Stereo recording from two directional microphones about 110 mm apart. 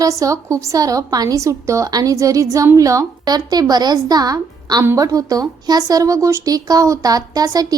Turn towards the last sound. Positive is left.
turn(degrees=-35)  # may be behind; listen again after turning